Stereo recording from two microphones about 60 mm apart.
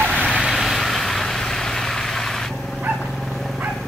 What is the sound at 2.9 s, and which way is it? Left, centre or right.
Dog, centre.